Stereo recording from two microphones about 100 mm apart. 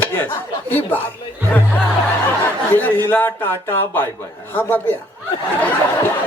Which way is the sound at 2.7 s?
20° left (ahead or behind).